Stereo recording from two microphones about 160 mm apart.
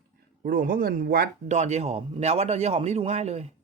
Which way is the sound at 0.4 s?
60° right (ahead or behind).